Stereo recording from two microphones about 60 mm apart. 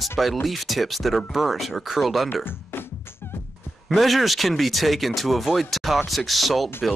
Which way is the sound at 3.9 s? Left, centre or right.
Centre.